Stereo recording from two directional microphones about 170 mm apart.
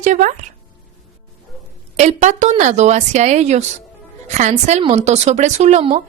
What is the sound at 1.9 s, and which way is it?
A woman's voice, 45° right (ahead or behind).